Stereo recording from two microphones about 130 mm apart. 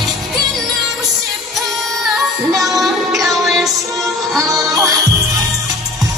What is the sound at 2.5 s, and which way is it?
Music, 25° right (ahead or behind).